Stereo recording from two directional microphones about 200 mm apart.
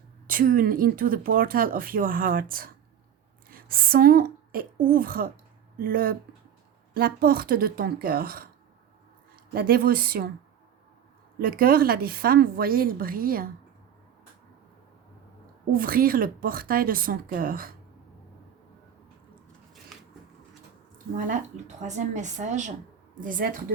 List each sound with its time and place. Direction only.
0.3 s a woman's voice: 45° right (ahead or behind)
11.3 s speech: 45° right (ahead or behind)
15.7 s speech: 45° right (ahead or behind)
21.2 s speech: 40° right (ahead or behind)